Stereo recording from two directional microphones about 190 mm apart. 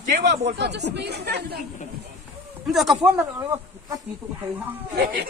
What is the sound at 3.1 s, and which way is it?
Speech, 15° right (ahead or behind).